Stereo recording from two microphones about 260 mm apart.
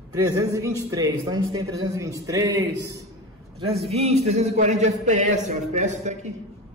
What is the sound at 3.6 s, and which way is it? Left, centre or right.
Speech, right.